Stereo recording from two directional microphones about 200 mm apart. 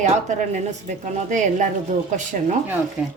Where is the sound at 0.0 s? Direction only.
35° right (ahead or behind).